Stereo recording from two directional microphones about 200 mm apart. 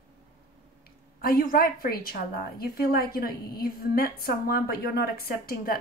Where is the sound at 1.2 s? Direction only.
45° left (ahead or behind).